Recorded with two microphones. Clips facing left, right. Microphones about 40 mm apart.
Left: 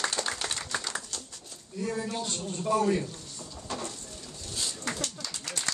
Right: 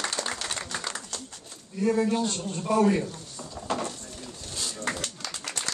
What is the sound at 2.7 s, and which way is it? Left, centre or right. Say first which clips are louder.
Speech: right 4 dB; right.